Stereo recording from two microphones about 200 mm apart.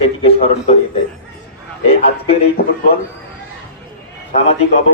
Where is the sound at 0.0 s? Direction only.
30° left (ahead or behind).